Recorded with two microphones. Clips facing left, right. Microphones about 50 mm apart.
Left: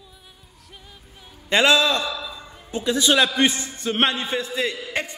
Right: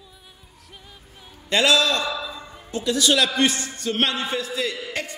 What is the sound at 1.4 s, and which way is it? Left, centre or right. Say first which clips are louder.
A man's voice: left 1 dB; left.